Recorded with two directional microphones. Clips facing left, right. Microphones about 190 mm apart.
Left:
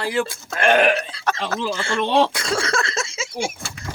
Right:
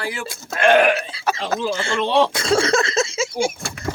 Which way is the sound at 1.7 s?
25° right (ahead or behind).